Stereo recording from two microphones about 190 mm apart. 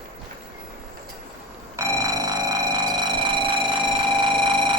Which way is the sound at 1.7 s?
15° right (ahead or behind).